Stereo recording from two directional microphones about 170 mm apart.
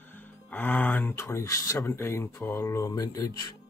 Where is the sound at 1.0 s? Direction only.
15° left (ahead or behind).